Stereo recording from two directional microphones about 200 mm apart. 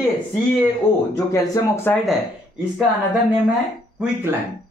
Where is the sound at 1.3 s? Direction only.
15° left (ahead or behind).